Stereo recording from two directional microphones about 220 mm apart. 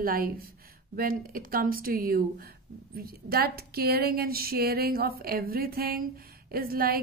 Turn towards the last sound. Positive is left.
turn(degrees=-40)  # may be behind; listen again after turning